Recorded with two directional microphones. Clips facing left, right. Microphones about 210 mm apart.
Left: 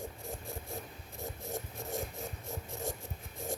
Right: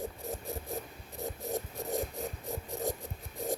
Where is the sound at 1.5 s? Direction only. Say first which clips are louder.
Right 5 dB; 20° right (ahead or behind).